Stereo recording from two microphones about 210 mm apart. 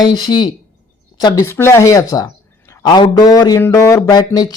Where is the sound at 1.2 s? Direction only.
15° left (ahead or behind).